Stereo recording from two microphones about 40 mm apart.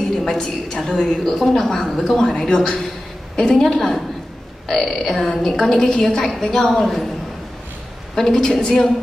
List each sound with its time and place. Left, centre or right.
0.2 s a woman's voice: centre
8.2 s a woman's voice: centre